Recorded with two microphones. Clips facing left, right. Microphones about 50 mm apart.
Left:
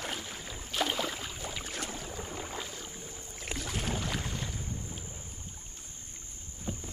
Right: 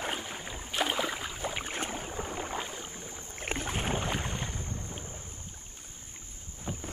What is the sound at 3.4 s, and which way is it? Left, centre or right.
Rowboat, right.